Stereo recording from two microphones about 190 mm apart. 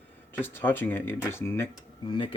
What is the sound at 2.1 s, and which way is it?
Speech, 25° left (ahead or behind).